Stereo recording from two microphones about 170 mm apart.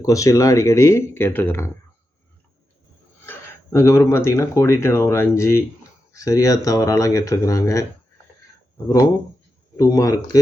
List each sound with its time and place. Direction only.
0.0 s speech: 20° left (ahead or behind)
3.2 s speech: 15° left (ahead or behind)
9.7 s speech: 20° left (ahead or behind)